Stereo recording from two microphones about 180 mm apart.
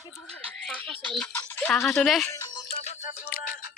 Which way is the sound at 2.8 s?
45° left (ahead or behind).